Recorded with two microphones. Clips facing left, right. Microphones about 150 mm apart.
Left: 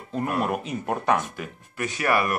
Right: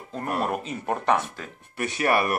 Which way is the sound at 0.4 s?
Centre (ahead or behind).